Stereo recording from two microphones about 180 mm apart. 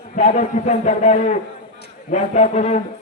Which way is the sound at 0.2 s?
35° left (ahead or behind).